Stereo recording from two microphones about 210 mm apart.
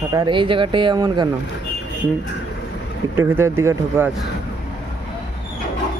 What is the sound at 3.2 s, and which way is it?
Speech, 10° right (ahead or behind).